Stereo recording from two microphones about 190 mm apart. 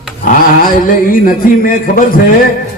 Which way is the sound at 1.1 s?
50° left (ahead or behind).